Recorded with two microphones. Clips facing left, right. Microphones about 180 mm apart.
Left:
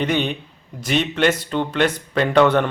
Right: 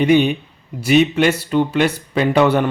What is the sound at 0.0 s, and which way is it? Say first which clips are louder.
Speech: right 7 dB; 10° right (ahead or behind).